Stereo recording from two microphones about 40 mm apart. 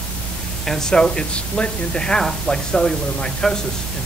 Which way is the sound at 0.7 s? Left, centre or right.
Centre.